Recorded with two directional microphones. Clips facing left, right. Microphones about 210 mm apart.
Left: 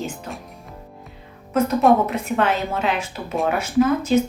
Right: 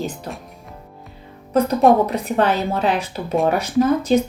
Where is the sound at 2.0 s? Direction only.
35° right (ahead or behind).